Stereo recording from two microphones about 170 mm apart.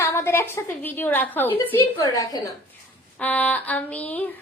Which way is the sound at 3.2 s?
10° left (ahead or behind).